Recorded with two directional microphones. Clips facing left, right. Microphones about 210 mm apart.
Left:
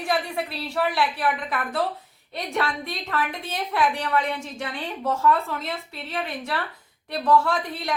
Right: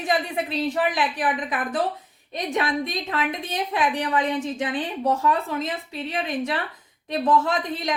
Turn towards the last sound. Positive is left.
turn(degrees=-20)  # may be behind; listen again after turning